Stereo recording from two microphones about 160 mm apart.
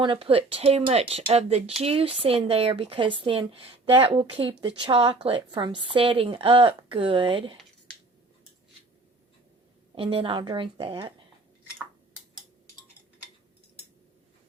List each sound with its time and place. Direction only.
0.0 s speech: 35° right (ahead or behind)
9.9 s speech: 35° right (ahead or behind)